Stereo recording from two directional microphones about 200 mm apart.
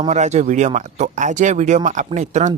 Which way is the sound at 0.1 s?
35° right (ahead or behind).